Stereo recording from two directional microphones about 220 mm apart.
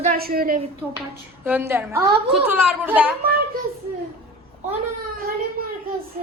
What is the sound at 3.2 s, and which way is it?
Speech, 45° right (ahead or behind).